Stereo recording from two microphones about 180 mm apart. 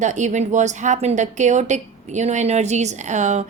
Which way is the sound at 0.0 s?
40° right (ahead or behind).